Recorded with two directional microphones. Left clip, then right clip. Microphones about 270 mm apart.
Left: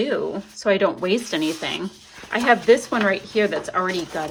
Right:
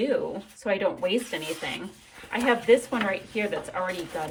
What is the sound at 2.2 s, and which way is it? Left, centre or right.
Speech, centre.